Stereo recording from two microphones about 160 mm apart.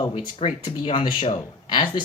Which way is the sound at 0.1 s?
40° left (ahead or behind).